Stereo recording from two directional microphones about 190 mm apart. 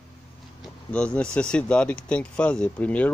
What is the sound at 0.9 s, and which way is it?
Speech, 5° left (ahead or behind).